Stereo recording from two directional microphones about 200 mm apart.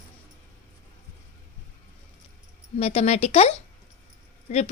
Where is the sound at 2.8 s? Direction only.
30° left (ahead or behind).